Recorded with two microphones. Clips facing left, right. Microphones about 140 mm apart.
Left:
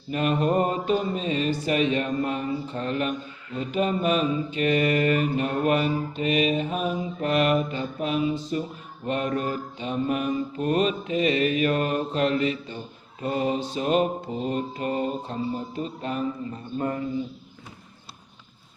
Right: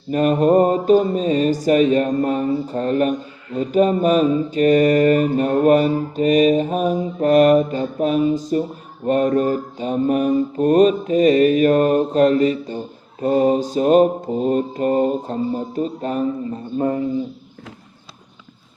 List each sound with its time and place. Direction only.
0.1 s mantra: 40° right (ahead or behind)
16.7 s speech: 25° right (ahead or behind)